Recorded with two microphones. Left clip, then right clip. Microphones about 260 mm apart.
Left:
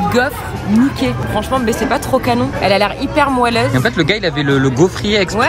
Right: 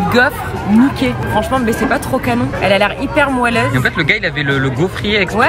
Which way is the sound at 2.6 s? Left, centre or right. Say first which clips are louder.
Right 3 dB; left.